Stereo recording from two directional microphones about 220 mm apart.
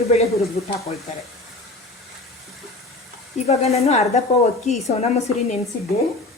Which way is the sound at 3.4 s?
30° left (ahead or behind).